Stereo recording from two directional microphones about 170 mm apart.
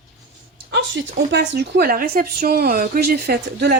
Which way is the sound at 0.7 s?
90° right.